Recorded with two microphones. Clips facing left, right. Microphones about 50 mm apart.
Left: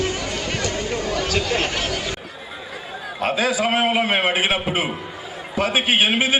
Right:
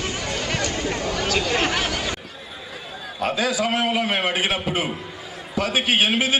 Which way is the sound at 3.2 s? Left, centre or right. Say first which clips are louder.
Left 2 dB; left.